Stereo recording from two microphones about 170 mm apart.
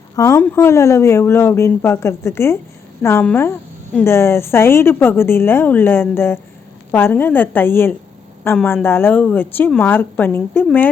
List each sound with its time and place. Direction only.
0.2 s a woman's voice: 15° left (ahead or behind)